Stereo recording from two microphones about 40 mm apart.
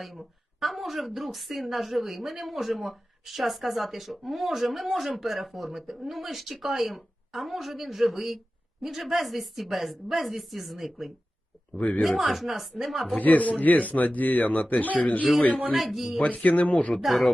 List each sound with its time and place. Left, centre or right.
0.0 s a woman's voice: centre
11.8 s speech: left
12.0 s a woman's voice: centre
13.1 s speech: left
15.7 s a woman's voice: centre
16.1 s speech: left
16.9 s a woman's voice: centre